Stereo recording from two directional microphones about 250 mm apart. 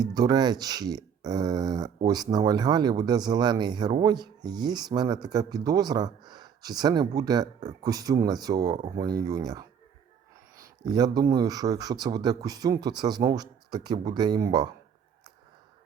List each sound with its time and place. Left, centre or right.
0.0 s speech: centre
10.8 s speech: centre